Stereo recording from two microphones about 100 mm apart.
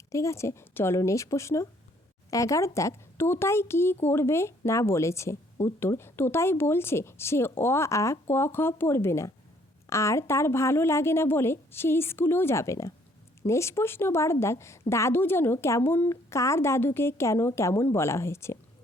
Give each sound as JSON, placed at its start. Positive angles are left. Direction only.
{"t": 0.1, "sound": "speech", "side_deg": 30}